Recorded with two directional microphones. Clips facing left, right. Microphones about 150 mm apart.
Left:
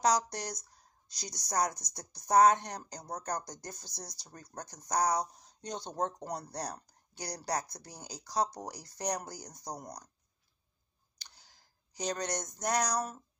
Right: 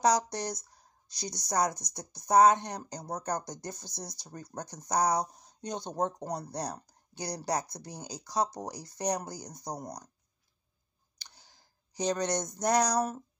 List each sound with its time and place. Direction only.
0.1 s speech: 25° right (ahead or behind)
5.2 s speech: 50° right (ahead or behind)
5.9 s speech: 20° right (ahead or behind)
12.0 s speech: 25° right (ahead or behind)